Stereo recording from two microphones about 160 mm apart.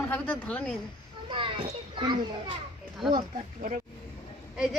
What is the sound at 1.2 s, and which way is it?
Children playing, 30° right (ahead or behind).